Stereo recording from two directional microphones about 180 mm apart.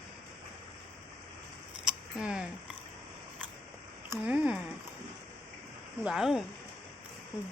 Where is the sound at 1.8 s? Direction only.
5° right (ahead or behind).